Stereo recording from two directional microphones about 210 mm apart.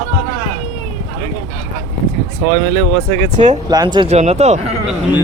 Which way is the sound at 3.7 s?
20° right (ahead or behind).